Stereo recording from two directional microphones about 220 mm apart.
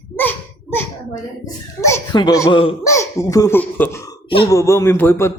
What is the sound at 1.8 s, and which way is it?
Speech, 15° left (ahead or behind).